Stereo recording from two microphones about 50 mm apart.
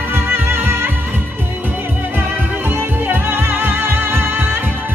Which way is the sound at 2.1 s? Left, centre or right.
Right.